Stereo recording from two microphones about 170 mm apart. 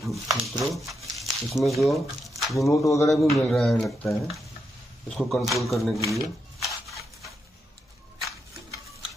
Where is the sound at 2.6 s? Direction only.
20° left (ahead or behind).